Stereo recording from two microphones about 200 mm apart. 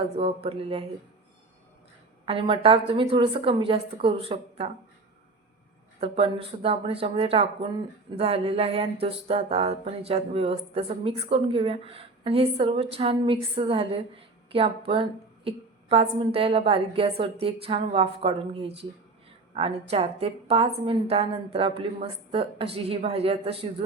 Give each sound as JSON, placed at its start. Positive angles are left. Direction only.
{"t": 0.2, "sound": "music", "side_deg": -30}
{"t": 2.2, "sound": "music", "side_deg": -25}
{"t": 6.0, "sound": "music", "side_deg": -30}